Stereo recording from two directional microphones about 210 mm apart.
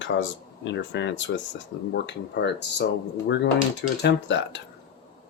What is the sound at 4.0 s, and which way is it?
Speech, 60° left (ahead or behind).